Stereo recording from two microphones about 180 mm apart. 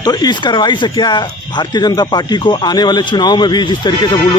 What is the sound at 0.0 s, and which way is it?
Speech, 20° left (ahead or behind).